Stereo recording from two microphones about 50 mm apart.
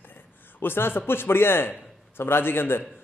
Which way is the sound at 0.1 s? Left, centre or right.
Left.